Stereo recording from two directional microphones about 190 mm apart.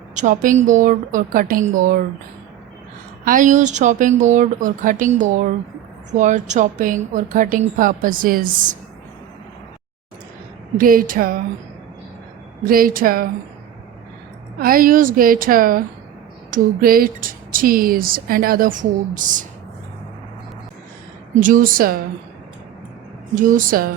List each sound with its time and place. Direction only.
0.1 s speech: 40° right (ahead or behind)
3.2 s speech: 45° right (ahead or behind)
10.8 s speech: 50° right (ahead or behind)
12.6 s speech: 50° right (ahead or behind)
14.6 s speech: 50° right (ahead or behind)
21.3 s speech: 45° right (ahead or behind)
23.3 s speech: 45° right (ahead or behind)